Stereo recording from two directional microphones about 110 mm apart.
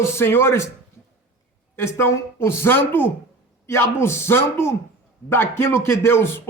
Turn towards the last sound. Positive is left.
turn(degrees=20)  # may be behind; listen again after turning